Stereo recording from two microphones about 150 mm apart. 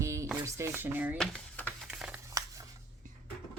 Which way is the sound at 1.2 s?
5° left (ahead or behind).